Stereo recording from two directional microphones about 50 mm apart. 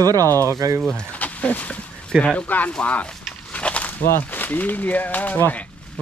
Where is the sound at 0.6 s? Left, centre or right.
Right.